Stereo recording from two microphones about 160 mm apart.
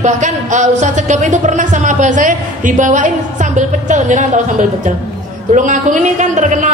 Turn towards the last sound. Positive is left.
turn(degrees=-50)  # may be behind; listen again after turning